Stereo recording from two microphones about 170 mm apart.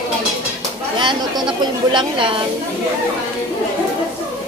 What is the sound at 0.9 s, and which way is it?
A woman's voice, 25° right (ahead or behind).